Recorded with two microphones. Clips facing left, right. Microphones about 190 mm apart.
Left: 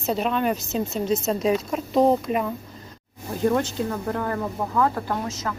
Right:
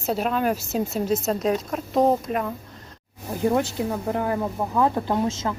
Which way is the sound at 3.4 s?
10° right (ahead or behind).